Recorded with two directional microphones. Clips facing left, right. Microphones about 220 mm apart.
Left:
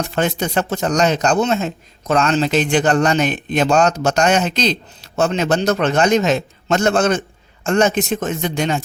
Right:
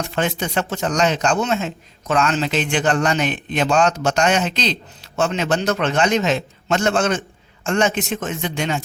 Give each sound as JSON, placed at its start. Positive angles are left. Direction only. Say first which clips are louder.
{"t": 0.2, "sound": "a man's voice", "louder": "left 3 dB", "side_deg": 40}